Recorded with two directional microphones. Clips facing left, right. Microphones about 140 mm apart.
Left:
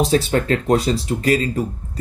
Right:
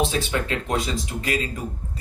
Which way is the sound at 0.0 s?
35° left (ahead or behind).